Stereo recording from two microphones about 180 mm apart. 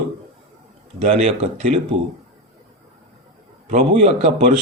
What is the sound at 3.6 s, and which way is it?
Speech, 35° right (ahead or behind).